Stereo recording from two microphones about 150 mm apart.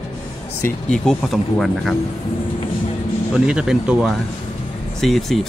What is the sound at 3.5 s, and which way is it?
Speech, 5° right (ahead or behind).